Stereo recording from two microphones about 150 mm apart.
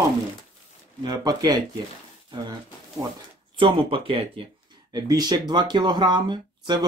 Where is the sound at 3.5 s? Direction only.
35° right (ahead or behind).